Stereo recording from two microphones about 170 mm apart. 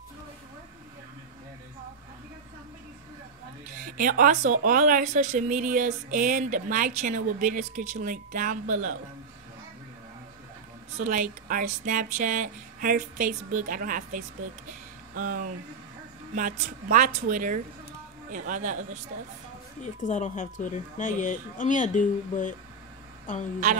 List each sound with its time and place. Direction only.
3.6 s speech: 50° right (ahead or behind)
11.0 s speech: 50° right (ahead or behind)
14.7 s a sound: 55° right (ahead or behind)
16.3 s speech: 50° right (ahead or behind)
19.8 s speech: 45° left (ahead or behind)